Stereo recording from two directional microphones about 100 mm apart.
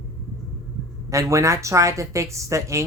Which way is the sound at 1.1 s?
30° right (ahead or behind).